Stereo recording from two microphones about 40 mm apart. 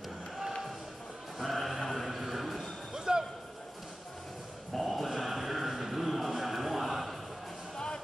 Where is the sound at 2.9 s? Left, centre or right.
Centre.